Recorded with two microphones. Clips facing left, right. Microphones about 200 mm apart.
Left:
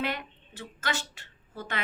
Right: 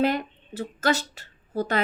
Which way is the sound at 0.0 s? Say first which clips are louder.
Right 9 dB; 40° right (ahead or behind).